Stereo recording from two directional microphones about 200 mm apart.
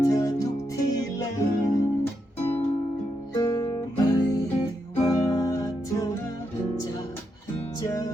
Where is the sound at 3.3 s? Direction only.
15° left (ahead or behind).